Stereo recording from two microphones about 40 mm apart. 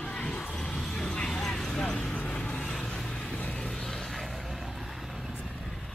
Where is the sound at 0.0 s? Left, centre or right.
Left.